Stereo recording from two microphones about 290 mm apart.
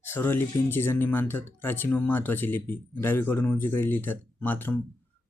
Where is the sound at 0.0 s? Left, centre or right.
Centre.